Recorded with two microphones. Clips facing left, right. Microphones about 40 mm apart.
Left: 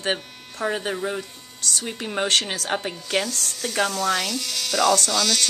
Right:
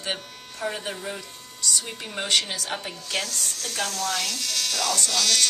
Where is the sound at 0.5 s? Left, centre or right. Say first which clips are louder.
Left 5 dB; left.